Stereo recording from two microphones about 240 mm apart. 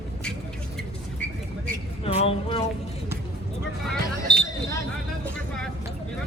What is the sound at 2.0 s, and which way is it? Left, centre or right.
Music, left.